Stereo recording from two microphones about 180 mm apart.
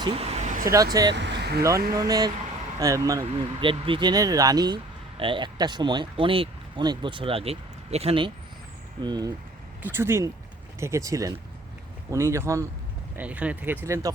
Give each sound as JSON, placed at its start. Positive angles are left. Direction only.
{"t": 0.0, "sound": "vehicle", "side_deg": -35}
{"t": 0.6, "sound": "speech", "side_deg": -15}
{"t": 1.1, "sound": "speech", "side_deg": -70}
{"t": 2.0, "sound": "speech", "side_deg": -20}